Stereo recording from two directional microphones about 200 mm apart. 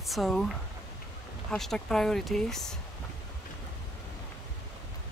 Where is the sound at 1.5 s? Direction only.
Centre (ahead or behind).